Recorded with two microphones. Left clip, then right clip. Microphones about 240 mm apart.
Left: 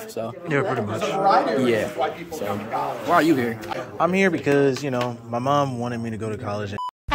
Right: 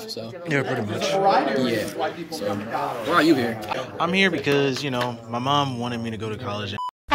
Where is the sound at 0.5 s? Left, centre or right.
Centre.